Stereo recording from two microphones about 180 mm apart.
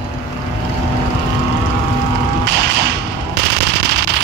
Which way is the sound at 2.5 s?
70° right (ahead or behind).